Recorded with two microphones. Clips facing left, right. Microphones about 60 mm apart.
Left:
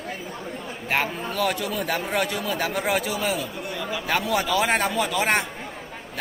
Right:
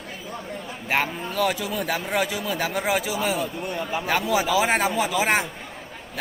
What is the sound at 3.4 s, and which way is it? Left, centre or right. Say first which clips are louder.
Speech: right 3 dB; right.